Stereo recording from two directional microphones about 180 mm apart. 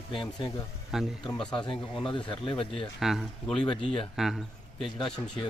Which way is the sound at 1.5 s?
25° left (ahead or behind).